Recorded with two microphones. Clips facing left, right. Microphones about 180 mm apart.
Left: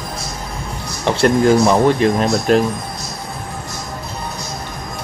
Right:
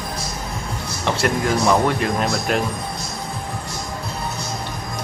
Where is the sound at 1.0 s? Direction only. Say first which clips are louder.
Left 7 dB; 30° left (ahead or behind).